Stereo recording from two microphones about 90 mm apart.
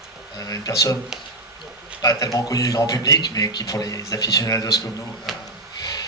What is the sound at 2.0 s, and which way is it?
A man's voice, 40° left (ahead or behind).